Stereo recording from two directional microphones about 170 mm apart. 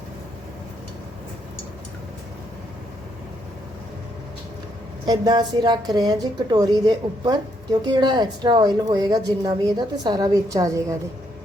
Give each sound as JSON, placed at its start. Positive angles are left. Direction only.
{"t": 5.0, "sound": "a woman's voice", "side_deg": -25}